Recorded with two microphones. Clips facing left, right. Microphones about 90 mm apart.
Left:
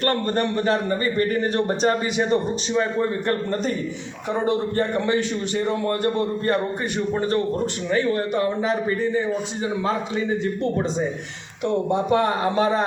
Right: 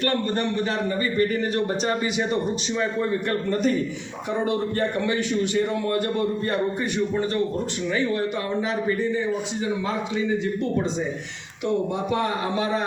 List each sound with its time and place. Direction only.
0.0 s a man's voice: 45° left (ahead or behind)
9.8 s a man's voice: 40° left (ahead or behind)
11.6 s a man's voice: 40° left (ahead or behind)